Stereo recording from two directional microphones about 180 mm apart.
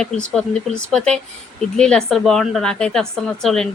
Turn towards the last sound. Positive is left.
turn(degrees=0)  # may be behind; listen again after turning